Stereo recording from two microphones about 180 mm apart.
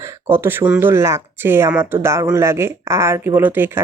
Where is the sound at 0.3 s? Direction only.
10° right (ahead or behind).